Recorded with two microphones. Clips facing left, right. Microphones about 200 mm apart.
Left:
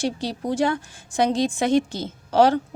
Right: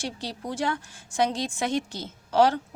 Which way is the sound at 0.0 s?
15° left (ahead or behind).